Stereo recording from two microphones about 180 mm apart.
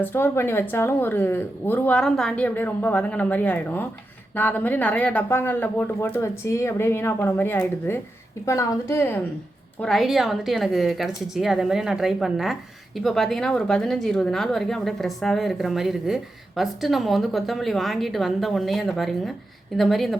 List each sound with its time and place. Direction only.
0.0 s speech: 10° left (ahead or behind)
9.8 s a woman's voice: centre (ahead or behind)